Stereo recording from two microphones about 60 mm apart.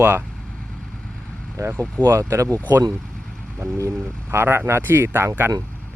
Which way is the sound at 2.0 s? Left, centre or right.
Right.